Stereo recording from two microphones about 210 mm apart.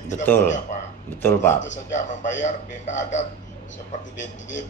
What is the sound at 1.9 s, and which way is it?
Speech, 35° left (ahead or behind).